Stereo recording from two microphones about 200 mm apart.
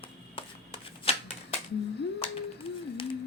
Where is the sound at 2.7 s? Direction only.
30° left (ahead or behind).